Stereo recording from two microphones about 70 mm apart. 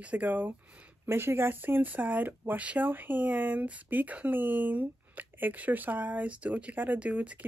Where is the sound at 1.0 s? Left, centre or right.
Right.